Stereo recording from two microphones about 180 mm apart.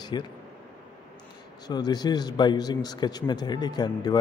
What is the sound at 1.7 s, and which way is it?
A man's voice, 20° left (ahead or behind).